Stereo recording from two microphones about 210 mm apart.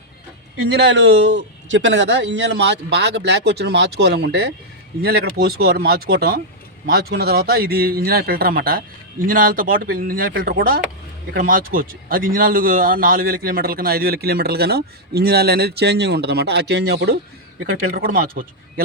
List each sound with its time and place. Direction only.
0.7 s a man's voice: 55° right (ahead or behind)